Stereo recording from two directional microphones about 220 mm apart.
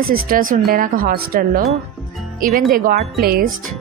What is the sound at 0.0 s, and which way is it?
Speech, 40° right (ahead or behind).